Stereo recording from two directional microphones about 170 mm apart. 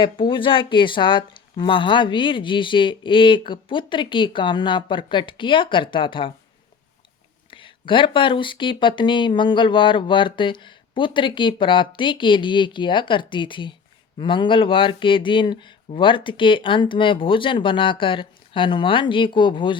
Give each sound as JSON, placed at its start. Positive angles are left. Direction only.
{"t": 0.0, "sound": "speech", "side_deg": 30}
{"t": 7.5, "sound": "speech", "side_deg": 30}